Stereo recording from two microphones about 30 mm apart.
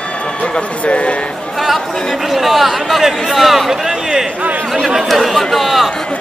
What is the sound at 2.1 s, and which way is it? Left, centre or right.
Speech, centre.